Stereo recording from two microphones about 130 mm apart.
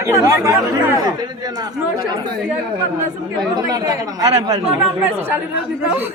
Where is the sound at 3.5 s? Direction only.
30° right (ahead or behind).